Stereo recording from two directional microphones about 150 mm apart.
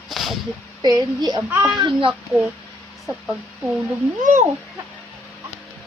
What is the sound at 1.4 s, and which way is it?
Speech, 10° right (ahead or behind).